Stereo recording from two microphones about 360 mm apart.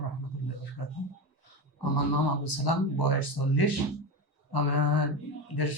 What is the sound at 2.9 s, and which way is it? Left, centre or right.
Speech, left.